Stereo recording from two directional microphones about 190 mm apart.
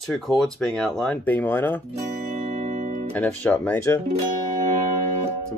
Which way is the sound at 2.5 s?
40° right (ahead or behind).